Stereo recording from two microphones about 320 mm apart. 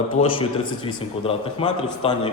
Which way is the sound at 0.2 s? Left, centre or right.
Centre.